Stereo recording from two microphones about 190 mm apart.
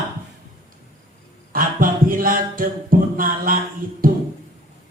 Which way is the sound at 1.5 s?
45° right (ahead or behind).